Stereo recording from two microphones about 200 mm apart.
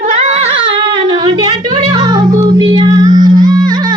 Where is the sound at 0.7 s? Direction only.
25° right (ahead or behind).